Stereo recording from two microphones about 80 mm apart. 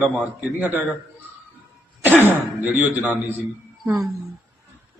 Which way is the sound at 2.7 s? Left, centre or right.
Right.